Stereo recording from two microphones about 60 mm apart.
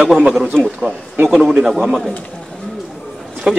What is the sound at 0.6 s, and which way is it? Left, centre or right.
A man's voice, centre.